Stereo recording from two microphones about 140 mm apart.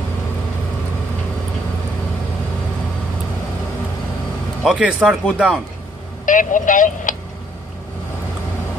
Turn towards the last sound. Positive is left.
turn(degrees=70)  # may be behind; listen again after turning